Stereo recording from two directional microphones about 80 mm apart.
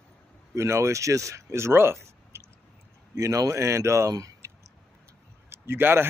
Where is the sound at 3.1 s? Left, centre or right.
Right.